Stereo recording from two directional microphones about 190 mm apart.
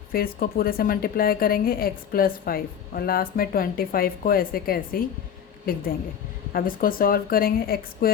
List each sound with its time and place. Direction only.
0.1 s a woman's voice: 50° left (ahead or behind)